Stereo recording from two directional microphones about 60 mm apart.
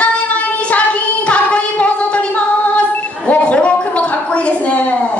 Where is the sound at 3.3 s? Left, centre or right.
Left.